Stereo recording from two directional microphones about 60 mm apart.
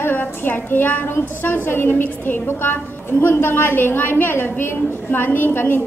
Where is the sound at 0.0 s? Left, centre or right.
Left.